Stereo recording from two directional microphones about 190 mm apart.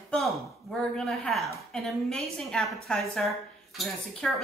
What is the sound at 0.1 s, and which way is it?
A woman's voice, centre (ahead or behind).